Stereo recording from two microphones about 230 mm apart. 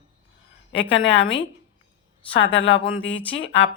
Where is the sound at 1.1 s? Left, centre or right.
Left.